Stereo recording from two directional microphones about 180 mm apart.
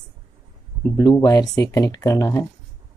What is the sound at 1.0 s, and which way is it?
Speech, 20° left (ahead or behind).